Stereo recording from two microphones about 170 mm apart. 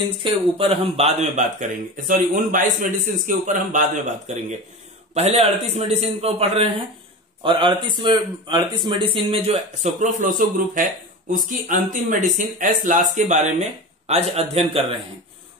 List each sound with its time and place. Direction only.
0.2 s speech: 35° right (ahead or behind); by 4.0 s 50° right (ahead or behind)
5.1 s a man's voice: 40° right (ahead or behind)
9.9 s speech: 50° right (ahead or behind)